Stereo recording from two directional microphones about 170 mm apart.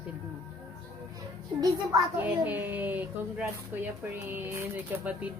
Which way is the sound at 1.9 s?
10° right (ahead or behind).